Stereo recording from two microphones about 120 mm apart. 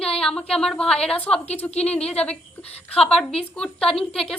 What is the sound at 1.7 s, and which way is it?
Speech, 65° left (ahead or behind).